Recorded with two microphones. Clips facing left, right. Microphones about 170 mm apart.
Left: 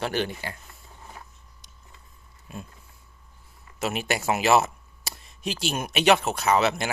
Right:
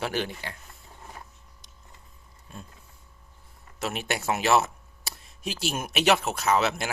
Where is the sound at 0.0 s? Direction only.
Centre (ahead or behind).